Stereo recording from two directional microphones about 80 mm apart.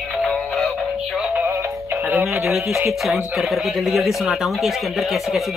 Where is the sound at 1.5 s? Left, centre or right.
Right.